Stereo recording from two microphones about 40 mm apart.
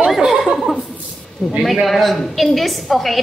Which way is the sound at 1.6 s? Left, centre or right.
Centre.